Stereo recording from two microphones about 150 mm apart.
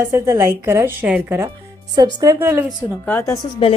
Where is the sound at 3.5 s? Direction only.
35° left (ahead or behind).